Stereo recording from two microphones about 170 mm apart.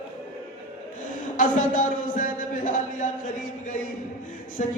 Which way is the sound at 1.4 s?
50° left (ahead or behind).